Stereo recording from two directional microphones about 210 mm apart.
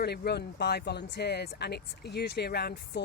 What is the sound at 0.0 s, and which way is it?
Speech, 50° left (ahead or behind).